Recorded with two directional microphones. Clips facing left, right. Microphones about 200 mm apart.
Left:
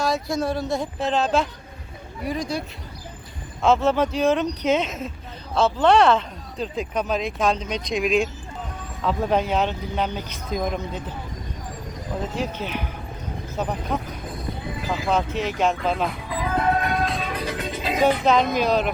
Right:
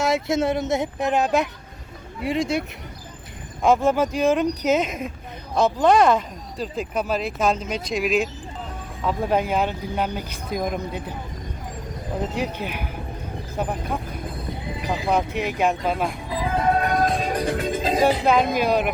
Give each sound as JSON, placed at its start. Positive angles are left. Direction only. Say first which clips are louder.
{"t": 0.0, "sound": "a woman's voice", "louder": "right 3 dB", "side_deg": -25}
{"t": 3.6, "sound": "speech", "louder": "right 1 dB", "side_deg": -10}
{"t": 12.3, "sound": "speech", "louder": "even", "side_deg": -15}
{"t": 16.3, "sound": "music", "louder": "right 1 dB", "side_deg": -30}
{"t": 18.5, "sound": "speech", "louder": "even", "side_deg": -10}